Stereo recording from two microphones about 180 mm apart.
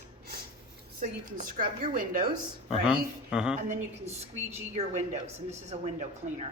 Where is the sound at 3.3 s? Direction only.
5° right (ahead or behind).